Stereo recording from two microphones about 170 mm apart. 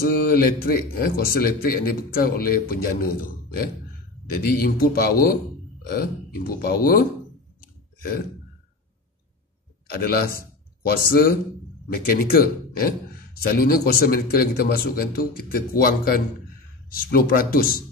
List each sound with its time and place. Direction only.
0.0 s speech: 60° left (ahead or behind)
9.8 s speech: 65° left (ahead or behind)